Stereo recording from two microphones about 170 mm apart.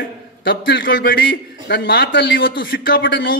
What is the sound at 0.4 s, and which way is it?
A man's voice, 65° left (ahead or behind).